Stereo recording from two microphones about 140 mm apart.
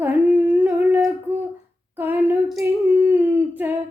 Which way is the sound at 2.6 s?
20° right (ahead or behind).